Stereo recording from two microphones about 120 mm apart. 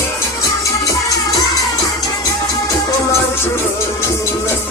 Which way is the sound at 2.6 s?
20° left (ahead or behind).